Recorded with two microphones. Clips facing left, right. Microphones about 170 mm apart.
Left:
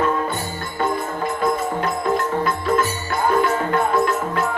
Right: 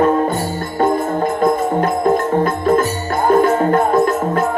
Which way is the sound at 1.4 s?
50° right (ahead or behind).